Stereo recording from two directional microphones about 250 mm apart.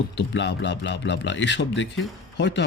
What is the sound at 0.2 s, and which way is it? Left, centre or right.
Speech, left.